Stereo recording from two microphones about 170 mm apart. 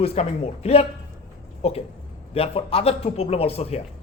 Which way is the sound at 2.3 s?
35° left (ahead or behind).